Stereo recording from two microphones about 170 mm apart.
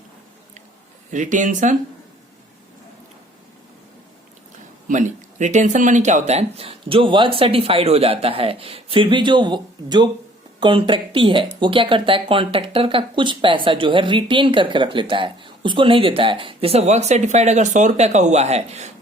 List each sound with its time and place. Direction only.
1.1 s speech: 45° right (ahead or behind)
4.9 s speech: 45° right (ahead or behind)